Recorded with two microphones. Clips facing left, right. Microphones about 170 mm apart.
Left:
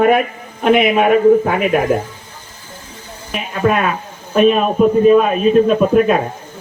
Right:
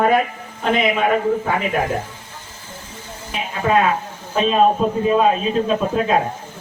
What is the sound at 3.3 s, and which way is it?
Speech, 65° left (ahead or behind).